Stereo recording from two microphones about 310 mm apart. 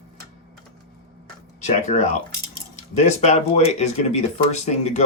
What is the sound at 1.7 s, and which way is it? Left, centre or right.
Speech, left.